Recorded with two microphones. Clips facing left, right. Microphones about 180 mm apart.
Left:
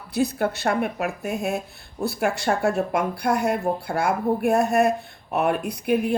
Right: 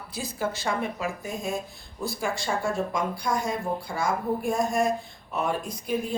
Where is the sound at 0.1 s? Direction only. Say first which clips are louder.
Left 8 dB; 65° left (ahead or behind).